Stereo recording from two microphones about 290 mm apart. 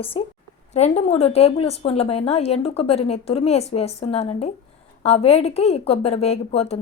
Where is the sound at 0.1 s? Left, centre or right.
Centre.